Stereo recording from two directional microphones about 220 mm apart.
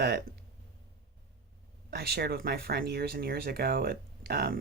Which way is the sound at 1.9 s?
45° right (ahead or behind).